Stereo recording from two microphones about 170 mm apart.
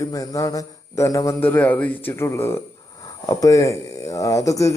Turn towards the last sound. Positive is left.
turn(degrees=20)  # may be behind; listen again after turning